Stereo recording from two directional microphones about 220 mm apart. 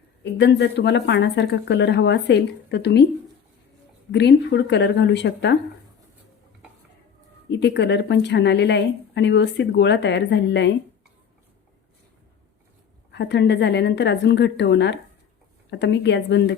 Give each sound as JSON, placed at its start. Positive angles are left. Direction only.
{"t": 0.3, "sound": "a woman's voice", "side_deg": 50}
{"t": 4.1, "sound": "a woman's voice", "side_deg": 50}
{"t": 7.5, "sound": "a woman's voice", "side_deg": 50}
{"t": 13.1, "sound": "a woman's voice", "side_deg": 50}